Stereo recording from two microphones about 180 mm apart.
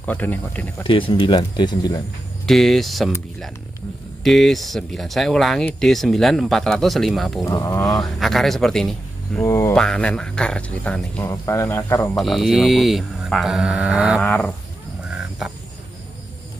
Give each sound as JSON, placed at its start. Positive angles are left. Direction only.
{"t": 0.0, "sound": "speech", "side_deg": 10}
{"t": 0.8, "sound": "speech", "side_deg": 30}
{"t": 2.4, "sound": "speech", "side_deg": 0}
{"t": 4.2, "sound": "speech", "side_deg": 0}
{"t": 7.4, "sound": "speech", "side_deg": 20}
{"t": 8.0, "sound": "speech", "side_deg": 0}
{"t": 9.4, "sound": "speech", "side_deg": 15}
{"t": 9.8, "sound": "speech", "side_deg": 5}
{"t": 12.2, "sound": "speech", "side_deg": 0}
{"t": 15.0, "sound": "a sound", "side_deg": -5}